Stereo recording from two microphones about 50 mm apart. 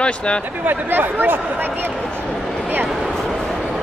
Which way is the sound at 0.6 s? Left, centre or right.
Right.